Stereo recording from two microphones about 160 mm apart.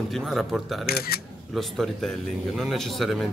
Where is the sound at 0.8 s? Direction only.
75° left (ahead or behind).